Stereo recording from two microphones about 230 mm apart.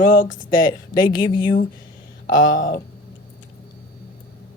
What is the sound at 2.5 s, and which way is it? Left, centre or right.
Speech, left.